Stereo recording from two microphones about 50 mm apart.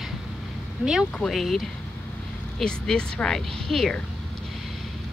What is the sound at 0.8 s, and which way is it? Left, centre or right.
Speech, right.